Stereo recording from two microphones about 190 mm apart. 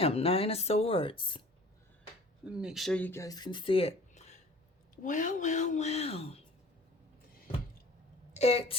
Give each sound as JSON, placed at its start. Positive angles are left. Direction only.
{"t": 0.0, "sound": "speech", "side_deg": 30}
{"t": 2.4, "sound": "speech", "side_deg": -5}
{"t": 8.3, "sound": "speech", "side_deg": 35}